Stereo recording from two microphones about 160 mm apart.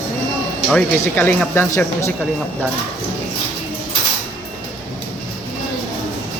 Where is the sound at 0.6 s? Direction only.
10° left (ahead or behind).